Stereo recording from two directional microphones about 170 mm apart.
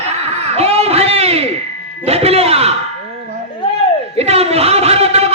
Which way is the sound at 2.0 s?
35° right (ahead or behind).